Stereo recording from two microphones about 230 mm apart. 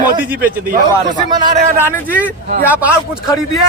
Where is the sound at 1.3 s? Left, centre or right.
Centre.